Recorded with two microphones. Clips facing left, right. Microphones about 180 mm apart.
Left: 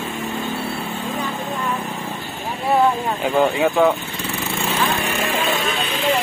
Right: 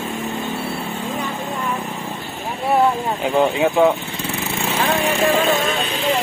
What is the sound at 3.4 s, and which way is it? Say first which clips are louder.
Speech: right 1 dB; 15° right (ahead or behind).